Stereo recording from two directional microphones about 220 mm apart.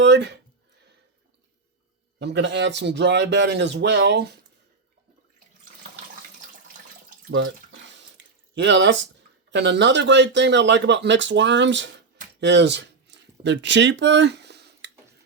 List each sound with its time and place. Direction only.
0.0 s speech: 50° right (ahead or behind)
2.1 s speech: 50° right (ahead or behind)
7.3 s water: 60° right (ahead or behind)
9.5 s speech: 55° right (ahead or behind)
12.4 s a sound: 50° right (ahead or behind)